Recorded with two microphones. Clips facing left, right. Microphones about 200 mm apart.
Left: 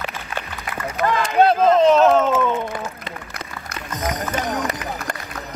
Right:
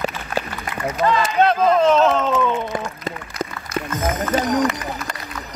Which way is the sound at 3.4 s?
40° right (ahead or behind).